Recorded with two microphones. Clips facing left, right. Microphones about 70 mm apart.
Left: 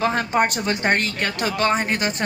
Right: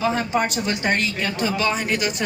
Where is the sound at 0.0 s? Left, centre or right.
Left.